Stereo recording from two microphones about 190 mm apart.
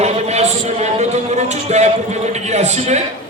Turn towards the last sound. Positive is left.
turn(degrees=-35)  # may be behind; listen again after turning